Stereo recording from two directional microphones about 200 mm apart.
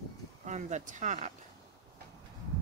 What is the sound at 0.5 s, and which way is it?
Speech, 35° right (ahead or behind).